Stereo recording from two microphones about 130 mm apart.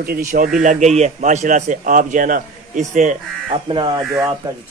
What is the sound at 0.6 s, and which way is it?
A man's voice, 65° right (ahead or behind).